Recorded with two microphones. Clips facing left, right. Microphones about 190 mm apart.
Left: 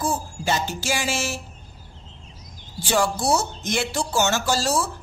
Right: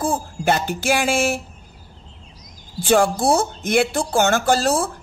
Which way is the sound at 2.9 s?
55° right (ahead or behind).